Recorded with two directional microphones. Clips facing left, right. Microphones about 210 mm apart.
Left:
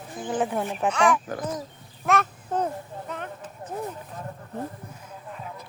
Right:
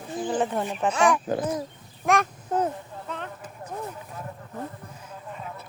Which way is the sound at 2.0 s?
10° right (ahead or behind).